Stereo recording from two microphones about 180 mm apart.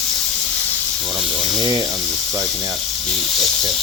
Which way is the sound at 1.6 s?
25° right (ahead or behind).